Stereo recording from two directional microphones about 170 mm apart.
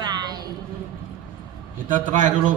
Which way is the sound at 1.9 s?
50° right (ahead or behind).